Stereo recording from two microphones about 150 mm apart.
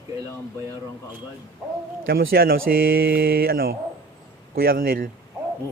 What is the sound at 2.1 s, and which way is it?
Speech, 80° right.